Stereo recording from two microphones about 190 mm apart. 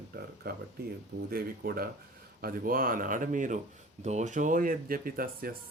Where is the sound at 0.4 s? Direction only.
55° right (ahead or behind).